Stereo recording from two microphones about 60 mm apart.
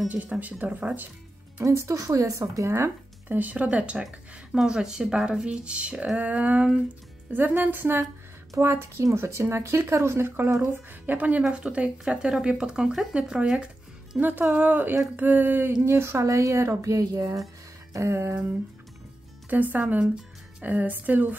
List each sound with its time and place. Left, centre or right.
0.1 s speech: right
1.6 s a woman's voice: right
3.3 s speech: right
4.0 s speech: centre
14.5 s speech: right
15.8 s a woman's voice: right
17.9 s speech: right
19.5 s speech: right